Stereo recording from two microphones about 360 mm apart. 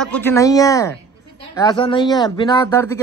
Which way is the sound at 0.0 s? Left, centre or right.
Centre.